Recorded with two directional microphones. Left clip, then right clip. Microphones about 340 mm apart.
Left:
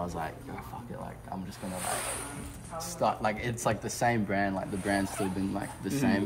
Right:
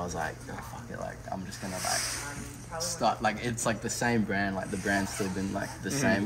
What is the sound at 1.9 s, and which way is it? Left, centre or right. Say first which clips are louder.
Speech: right 3 dB; centre.